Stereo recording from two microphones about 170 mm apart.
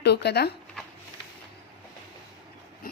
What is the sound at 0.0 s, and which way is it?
Speech, 75° left (ahead or behind).